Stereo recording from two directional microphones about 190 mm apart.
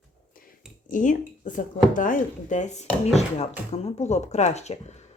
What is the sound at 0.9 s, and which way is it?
Speech, 45° left (ahead or behind).